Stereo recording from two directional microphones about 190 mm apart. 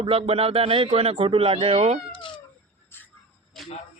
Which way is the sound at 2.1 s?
25° left (ahead or behind).